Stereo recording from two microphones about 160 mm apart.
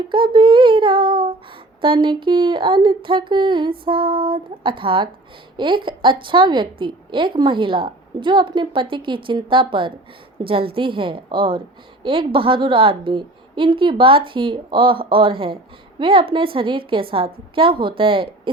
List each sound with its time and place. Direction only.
0.3 s a woman's voice: 30° right (ahead or behind)